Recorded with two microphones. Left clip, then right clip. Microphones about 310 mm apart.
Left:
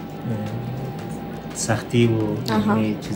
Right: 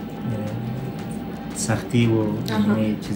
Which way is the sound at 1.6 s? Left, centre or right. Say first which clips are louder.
Left 3 dB; centre.